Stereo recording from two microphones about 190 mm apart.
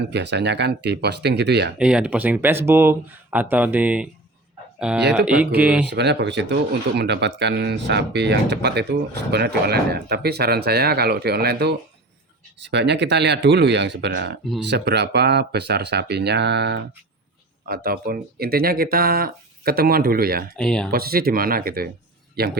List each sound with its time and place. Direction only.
0.0 s speech: 65° right (ahead or behind)
1.8 s speech: 5° right (ahead or behind)
5.9 s speech: 65° right (ahead or behind)
17.7 s speech: 50° right (ahead or behind)
20.6 s speech: 5° left (ahead or behind)
20.9 s speech: 50° right (ahead or behind)